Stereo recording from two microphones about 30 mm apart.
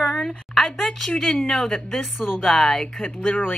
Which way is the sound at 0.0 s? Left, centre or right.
Centre.